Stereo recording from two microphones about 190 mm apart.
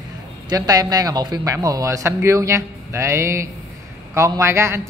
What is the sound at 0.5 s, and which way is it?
A man's voice, 20° right (ahead or behind).